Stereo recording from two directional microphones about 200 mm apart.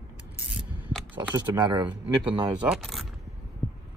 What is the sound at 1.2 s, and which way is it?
Speech, 20° right (ahead or behind).